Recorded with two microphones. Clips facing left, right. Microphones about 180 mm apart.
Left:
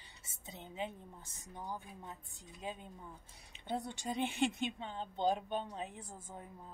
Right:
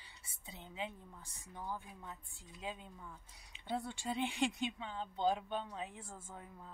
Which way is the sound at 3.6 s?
20° left (ahead or behind).